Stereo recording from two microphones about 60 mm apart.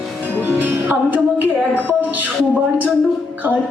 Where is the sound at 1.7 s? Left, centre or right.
Right.